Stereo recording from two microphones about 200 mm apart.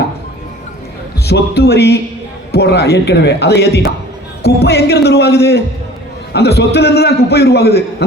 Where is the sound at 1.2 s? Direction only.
55° left (ahead or behind).